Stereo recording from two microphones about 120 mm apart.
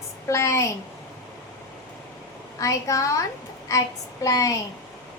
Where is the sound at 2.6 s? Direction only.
25° left (ahead or behind).